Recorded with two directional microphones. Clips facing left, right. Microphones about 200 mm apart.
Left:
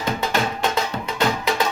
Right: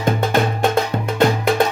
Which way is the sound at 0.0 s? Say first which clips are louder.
Right 5 dB; 50° right (ahead or behind).